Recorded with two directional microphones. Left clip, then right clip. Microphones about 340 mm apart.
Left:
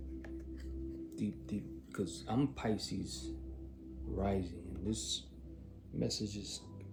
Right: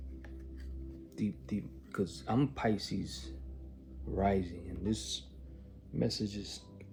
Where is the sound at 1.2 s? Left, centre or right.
Centre.